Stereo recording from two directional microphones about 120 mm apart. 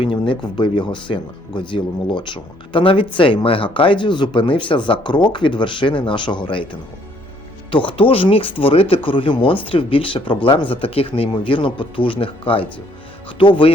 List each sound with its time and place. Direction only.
0.0 s speech: 45° left (ahead or behind)